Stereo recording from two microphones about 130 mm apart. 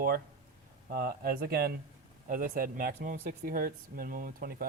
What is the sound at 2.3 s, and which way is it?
Speech, 90° right.